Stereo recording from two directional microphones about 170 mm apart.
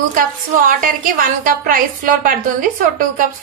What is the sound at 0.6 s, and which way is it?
A woman's voice, 55° right (ahead or behind).